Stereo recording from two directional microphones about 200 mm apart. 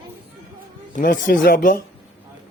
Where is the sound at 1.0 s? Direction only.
45° left (ahead or behind).